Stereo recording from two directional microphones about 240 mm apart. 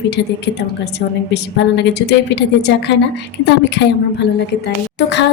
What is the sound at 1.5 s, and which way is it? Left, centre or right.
Speech, left.